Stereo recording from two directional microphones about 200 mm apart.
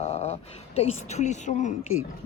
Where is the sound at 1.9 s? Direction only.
90° left.